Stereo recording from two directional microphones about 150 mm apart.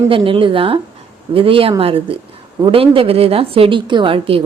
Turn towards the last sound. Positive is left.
turn(degrees=-35)  # may be behind; listen again after turning